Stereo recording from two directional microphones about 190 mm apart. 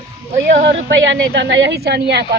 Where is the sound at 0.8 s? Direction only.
70° right (ahead or behind).